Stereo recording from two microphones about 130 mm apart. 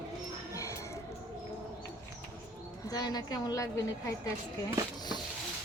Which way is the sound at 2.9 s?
30° left (ahead or behind).